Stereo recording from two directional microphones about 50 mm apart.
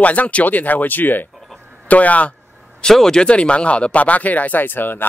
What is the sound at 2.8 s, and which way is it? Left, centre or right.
Speech, centre.